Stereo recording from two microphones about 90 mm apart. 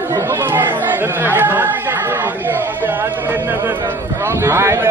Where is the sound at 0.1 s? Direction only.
25° right (ahead or behind).